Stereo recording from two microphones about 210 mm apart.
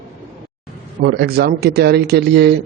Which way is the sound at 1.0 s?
50° right (ahead or behind).